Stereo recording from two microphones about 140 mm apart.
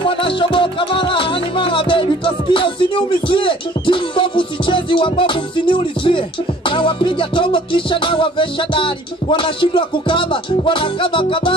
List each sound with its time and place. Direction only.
0.1 s music: 40° left (ahead or behind)